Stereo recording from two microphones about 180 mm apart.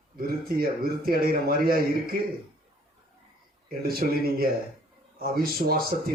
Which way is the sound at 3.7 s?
55° right (ahead or behind).